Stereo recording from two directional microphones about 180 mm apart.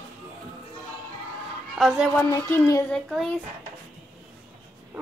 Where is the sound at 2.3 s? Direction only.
20° left (ahead or behind).